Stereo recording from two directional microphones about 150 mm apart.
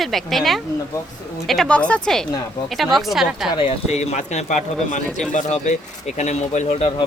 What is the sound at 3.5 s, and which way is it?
Speech, 40° left (ahead or behind).